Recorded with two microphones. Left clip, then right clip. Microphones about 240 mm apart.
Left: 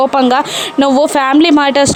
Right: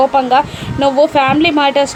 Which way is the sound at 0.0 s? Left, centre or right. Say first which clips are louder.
Even; left.